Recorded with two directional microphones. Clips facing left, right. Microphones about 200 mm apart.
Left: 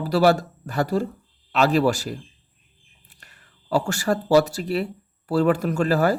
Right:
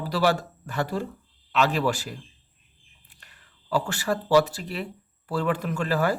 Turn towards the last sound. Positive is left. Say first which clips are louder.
# left 5 dB
turn(degrees=40)  # may be behind; listen again after turning